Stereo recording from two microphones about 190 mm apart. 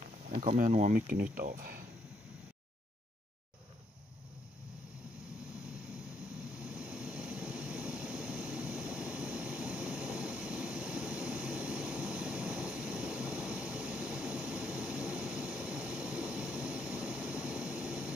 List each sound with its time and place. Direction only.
0.6 s speech: 40° right (ahead or behind)
6.6 s vehicle: 5° right (ahead or behind)